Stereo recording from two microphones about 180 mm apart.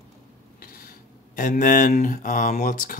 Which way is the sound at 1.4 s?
45° left (ahead or behind).